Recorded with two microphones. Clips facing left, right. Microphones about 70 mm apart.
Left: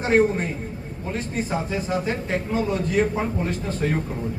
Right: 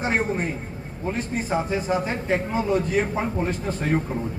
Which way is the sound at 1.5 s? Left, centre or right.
Right.